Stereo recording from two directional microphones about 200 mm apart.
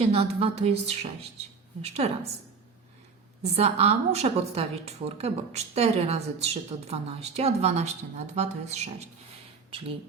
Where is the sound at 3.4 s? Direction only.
30° right (ahead or behind).